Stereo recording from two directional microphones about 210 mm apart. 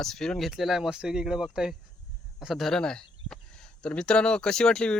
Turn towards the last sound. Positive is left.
turn(degrees=5)  # may be behind; listen again after turning